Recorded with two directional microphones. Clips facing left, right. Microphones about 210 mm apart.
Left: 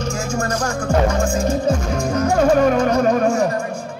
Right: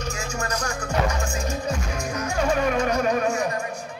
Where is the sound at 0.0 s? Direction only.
45° left (ahead or behind).